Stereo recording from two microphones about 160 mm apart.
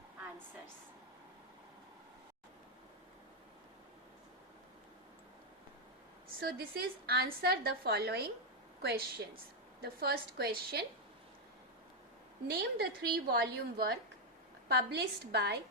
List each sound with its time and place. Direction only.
6.4 s a woman's voice: 75° right (ahead or behind); by 9.0 s 90° right
9.8 s a woman's voice: 80° right
12.5 s a woman's voice: 80° right
14.7 s a woman's voice: 90° right